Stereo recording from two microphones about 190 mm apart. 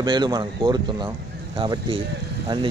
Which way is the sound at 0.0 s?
25° right (ahead or behind).